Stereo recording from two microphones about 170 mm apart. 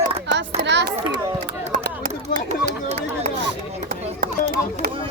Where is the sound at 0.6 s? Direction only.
90° right.